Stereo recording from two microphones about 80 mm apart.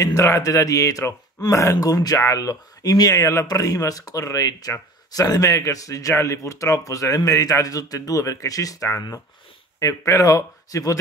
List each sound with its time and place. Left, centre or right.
0.0 s speech: left